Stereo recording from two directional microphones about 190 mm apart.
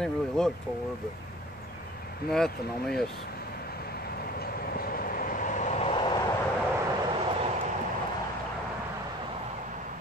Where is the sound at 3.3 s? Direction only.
55° left (ahead or behind); by 6.3 s 20° left (ahead or behind).